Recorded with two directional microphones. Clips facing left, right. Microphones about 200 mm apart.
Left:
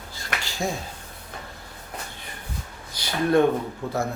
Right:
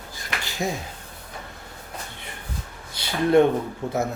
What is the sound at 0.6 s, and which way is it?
Speech, 15° right (ahead or behind).